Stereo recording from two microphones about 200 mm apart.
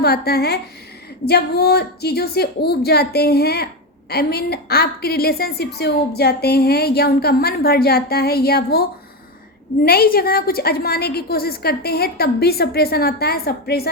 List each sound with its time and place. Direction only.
0.0 s a woman's voice: 50° left (ahead or behind)
9.8 s a woman's voice: 50° left (ahead or behind)